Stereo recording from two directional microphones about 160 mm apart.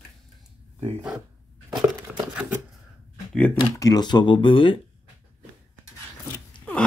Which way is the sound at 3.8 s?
25° left (ahead or behind).